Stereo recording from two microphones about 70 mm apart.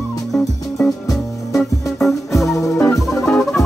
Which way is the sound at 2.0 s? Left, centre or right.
Centre.